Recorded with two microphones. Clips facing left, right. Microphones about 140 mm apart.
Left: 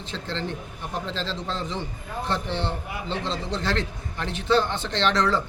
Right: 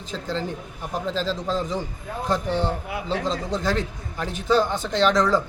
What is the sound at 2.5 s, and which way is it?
A man's voice, 45° right (ahead or behind).